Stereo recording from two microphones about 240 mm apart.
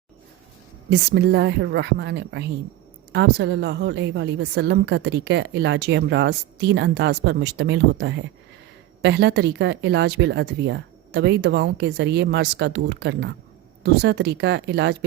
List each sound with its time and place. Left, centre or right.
0.9 s a woman's voice: right